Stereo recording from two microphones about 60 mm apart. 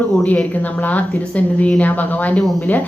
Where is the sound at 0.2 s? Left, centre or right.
Left.